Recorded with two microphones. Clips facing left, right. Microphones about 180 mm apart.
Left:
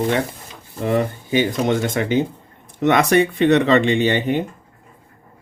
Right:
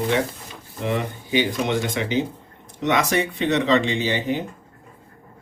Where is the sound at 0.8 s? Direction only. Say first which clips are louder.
Left 5 dB; 40° left (ahead or behind).